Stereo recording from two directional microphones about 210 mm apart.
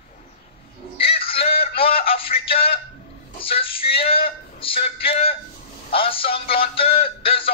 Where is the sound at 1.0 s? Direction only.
25° left (ahead or behind).